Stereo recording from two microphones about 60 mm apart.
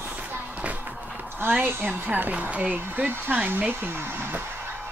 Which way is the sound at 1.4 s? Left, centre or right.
Right.